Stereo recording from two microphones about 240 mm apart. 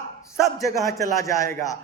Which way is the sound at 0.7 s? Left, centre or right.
Centre.